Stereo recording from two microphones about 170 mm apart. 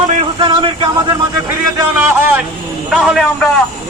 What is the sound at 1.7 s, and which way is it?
Speech, 15° right (ahead or behind).